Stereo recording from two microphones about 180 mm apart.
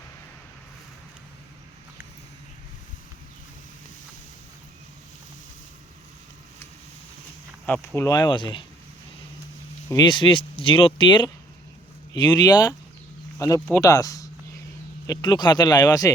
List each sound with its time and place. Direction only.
7.7 s speech: 15° left (ahead or behind)
9.9 s speech: 25° left (ahead or behind)